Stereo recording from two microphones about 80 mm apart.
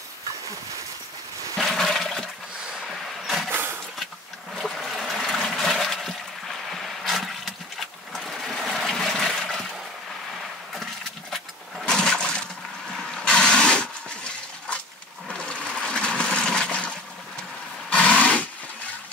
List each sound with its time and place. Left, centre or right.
1.6 s toilet flush: centre
3.3 s vehicle: centre
4.6 s trickle: centre
6.7 s a sound: centre
8.1 s water: centre
10.7 s a sound: centre
13.1 s vehicle: centre
15.2 s toilet flush: centre
17.8 s a sound: centre